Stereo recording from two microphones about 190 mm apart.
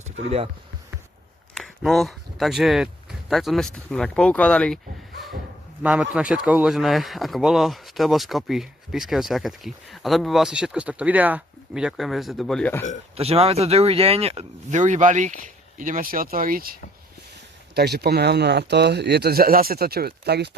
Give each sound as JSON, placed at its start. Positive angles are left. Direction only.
{"t": 1.5, "sound": "speech", "side_deg": 0}
{"t": 5.8, "sound": "speech", "side_deg": -5}
{"t": 13.1, "sound": "speech", "side_deg": -30}
{"t": 17.7, "sound": "speech", "side_deg": -60}